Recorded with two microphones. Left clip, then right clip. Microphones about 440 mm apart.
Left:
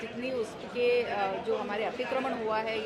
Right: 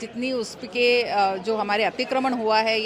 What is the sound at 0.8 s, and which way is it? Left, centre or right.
A woman's voice, right.